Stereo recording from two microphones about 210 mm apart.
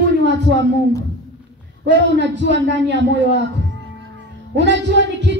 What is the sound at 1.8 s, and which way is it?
A man's voice, 55° right (ahead or behind).